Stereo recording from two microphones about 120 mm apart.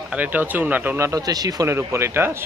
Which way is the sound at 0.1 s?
15° right (ahead or behind).